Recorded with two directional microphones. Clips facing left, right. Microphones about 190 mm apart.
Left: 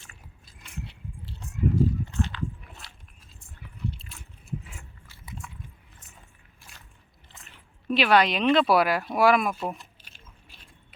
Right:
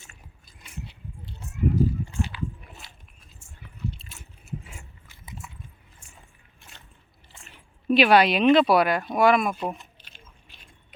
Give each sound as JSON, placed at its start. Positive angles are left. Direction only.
{"t": 1.4, "sound": "a sound", "side_deg": -5}
{"t": 4.7, "sound": "biting", "side_deg": -20}
{"t": 7.9, "sound": "speech", "side_deg": -15}